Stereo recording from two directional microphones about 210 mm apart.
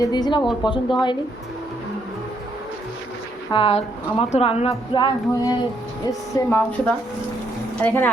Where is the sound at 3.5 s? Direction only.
25° left (ahead or behind).